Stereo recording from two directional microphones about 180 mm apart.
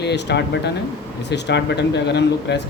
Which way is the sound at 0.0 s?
70° left (ahead or behind).